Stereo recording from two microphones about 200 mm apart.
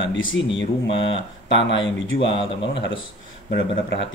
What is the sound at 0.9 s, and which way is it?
Speech, 25° left (ahead or behind).